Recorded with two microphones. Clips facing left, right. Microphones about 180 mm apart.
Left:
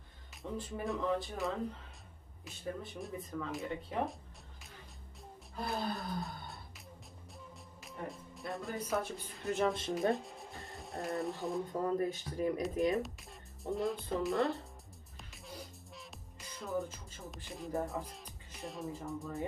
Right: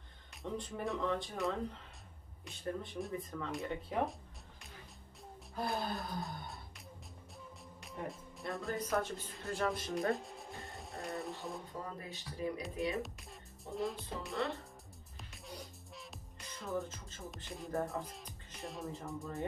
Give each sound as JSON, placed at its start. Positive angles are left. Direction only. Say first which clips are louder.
{"t": 0.3, "sound": "speech", "louder": "even", "side_deg": 0}
{"t": 5.7, "sound": "a sound", "louder": "left 2 dB", "side_deg": 0}
{"t": 7.8, "sound": "speech", "louder": "even", "side_deg": 0}
{"t": 9.4, "sound": "speech", "louder": "left 5 dB", "side_deg": 20}
{"t": 10.1, "sound": "speech", "louder": "left 2 dB", "side_deg": 0}
{"t": 11.8, "sound": "speech", "louder": "left 12 dB", "side_deg": 45}
{"t": 12.9, "sound": "speech", "louder": "left 5 dB", "side_deg": 0}
{"t": 15.3, "sound": "music", "louder": "left 1 dB", "side_deg": 0}